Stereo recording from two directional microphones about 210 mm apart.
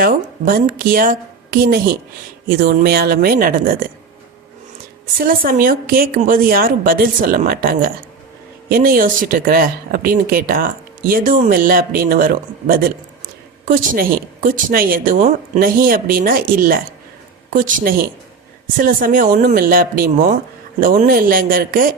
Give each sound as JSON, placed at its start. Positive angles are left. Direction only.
{"t": 0.0, "sound": "speech", "side_deg": -45}
{"t": 5.1, "sound": "speech", "side_deg": -45}